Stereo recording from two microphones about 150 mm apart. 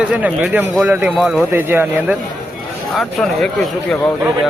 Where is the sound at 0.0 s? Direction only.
5° right (ahead or behind).